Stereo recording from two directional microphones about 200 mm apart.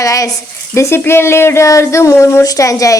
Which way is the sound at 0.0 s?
15° left (ahead or behind).